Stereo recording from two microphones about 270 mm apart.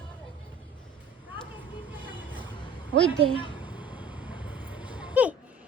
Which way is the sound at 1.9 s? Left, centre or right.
Centre.